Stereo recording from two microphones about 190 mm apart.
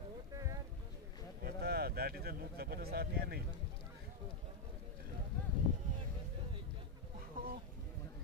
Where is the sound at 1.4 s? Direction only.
55° right (ahead or behind).